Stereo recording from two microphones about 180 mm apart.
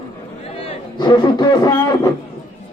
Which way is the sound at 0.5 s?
25° left (ahead or behind).